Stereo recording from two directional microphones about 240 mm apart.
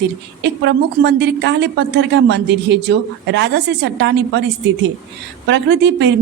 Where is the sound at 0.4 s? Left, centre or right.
Right.